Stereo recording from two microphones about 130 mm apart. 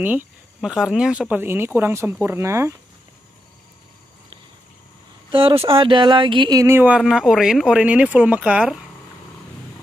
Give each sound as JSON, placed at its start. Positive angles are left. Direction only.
{"t": 0.0, "sound": "speech", "side_deg": -15}
{"t": 5.3, "sound": "speech", "side_deg": -45}
{"t": 6.6, "sound": "speech", "side_deg": -15}
{"t": 7.0, "sound": "speech", "side_deg": -5}